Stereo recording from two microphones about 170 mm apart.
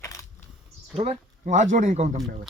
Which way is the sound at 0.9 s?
40° right (ahead or behind).